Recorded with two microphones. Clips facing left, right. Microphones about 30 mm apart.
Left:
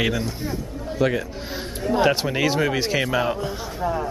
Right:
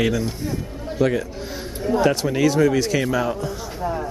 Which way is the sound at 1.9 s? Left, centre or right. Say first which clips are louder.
Right 1 dB; left.